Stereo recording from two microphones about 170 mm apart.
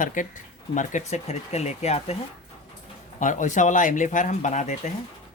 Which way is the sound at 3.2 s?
45° left (ahead or behind).